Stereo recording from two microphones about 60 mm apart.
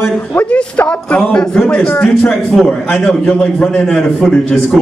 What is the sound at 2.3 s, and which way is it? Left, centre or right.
Speech, centre.